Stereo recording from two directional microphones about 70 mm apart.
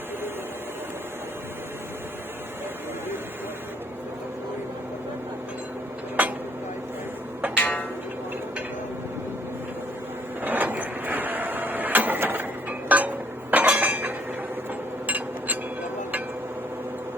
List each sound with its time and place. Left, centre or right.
7.5 s music: left
10.4 s a sound: right
12.9 s chink: right
15.0 s glass: right